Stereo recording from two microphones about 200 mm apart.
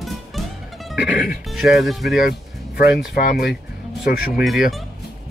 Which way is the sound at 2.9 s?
50° left (ahead or behind).